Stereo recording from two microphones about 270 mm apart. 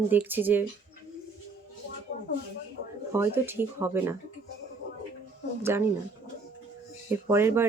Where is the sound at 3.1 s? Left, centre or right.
Centre.